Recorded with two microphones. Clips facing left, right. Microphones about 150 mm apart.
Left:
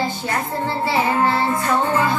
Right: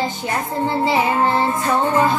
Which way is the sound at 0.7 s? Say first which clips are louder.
Right 3 dB; 15° right (ahead or behind).